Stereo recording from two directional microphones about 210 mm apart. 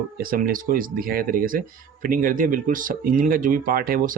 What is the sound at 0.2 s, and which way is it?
Speech, 45° right (ahead or behind).